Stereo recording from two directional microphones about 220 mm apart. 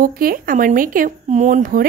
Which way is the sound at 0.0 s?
40° right (ahead or behind).